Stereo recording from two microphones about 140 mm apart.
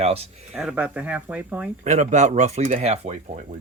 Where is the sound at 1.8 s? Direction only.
60° right (ahead or behind).